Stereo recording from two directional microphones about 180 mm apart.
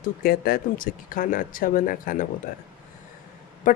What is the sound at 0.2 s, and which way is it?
Speech, 55° left (ahead or behind).